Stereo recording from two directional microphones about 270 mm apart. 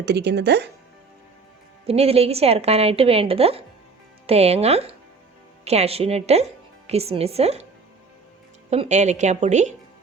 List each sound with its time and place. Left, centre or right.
0.0 s speech: right
1.9 s a woman's voice: right
8.7 s a woman's voice: right